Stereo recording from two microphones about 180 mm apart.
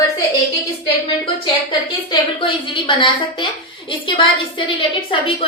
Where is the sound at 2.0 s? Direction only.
25° left (ahead or behind).